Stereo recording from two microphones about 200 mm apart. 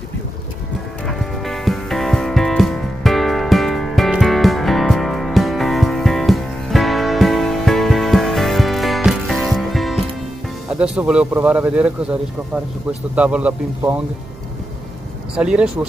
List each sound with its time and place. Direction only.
1.0 s music: centre (ahead or behind)
10.7 s a man's voice: 5° right (ahead or behind)
15.3 s speech: 5° right (ahead or behind)